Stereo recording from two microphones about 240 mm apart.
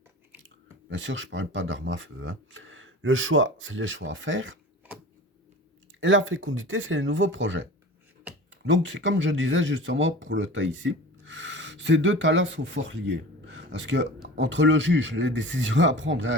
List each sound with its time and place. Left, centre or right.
0.9 s speech: right
6.0 s speech: right
8.3 s a sound: centre
8.6 s speech: right